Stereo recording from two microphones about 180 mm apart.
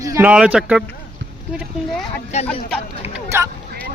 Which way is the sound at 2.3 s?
40° left (ahead or behind).